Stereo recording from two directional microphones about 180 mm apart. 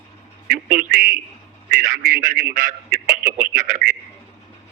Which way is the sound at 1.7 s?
50° right (ahead or behind).